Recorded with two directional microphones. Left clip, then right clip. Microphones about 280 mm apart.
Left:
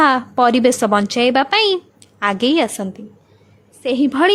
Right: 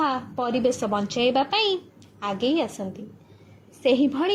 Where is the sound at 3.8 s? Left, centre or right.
Centre.